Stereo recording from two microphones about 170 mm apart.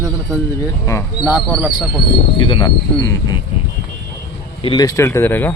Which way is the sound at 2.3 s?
25° left (ahead or behind).